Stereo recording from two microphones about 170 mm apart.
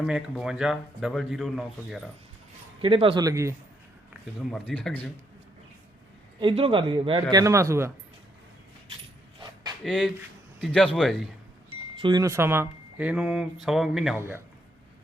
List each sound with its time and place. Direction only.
0.0 s speech: 5° right (ahead or behind)
2.8 s speech: 30° right (ahead or behind)
3.2 s a man's voice: 20° right (ahead or behind)
4.5 s speech: 5° left (ahead or behind)
6.4 s a man's voice: 30° right (ahead or behind); by 7.9 s 15° right (ahead or behind)
9.8 s a man's voice: 5° left (ahead or behind)
12.0 s speech: 20° right (ahead or behind); by 14.2 s centre (ahead or behind)
14.2 s a man's voice: 15° right (ahead or behind)